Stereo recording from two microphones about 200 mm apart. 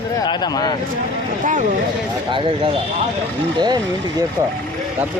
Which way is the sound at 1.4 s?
40° right (ahead or behind).